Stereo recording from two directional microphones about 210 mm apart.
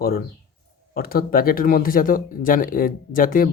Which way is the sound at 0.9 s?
45° left (ahead or behind).